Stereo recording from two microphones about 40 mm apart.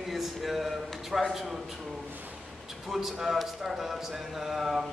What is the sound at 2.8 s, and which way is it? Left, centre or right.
A man's voice, centre.